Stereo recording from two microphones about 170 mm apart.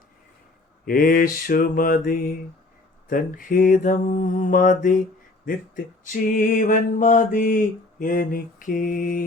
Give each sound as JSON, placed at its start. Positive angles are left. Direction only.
{"t": 0.9, "sound": "mantra", "side_deg": 55}